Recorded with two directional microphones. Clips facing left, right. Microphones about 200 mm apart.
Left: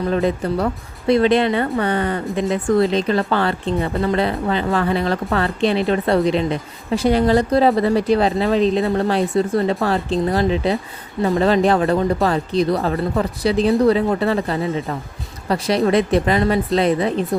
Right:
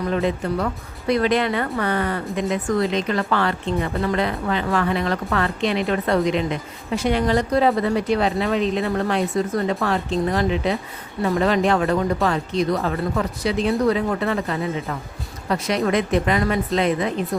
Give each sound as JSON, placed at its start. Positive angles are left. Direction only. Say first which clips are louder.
{"t": 0.1, "sound": "speech", "louder": "left 3 dB", "side_deg": 35}